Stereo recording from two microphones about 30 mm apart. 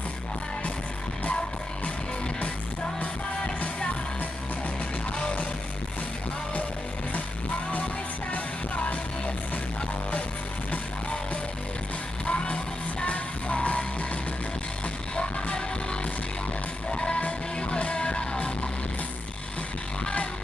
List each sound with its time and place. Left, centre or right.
8.3 s music: left
12.3 s music: left
13.0 s music: left
15.1 s music: left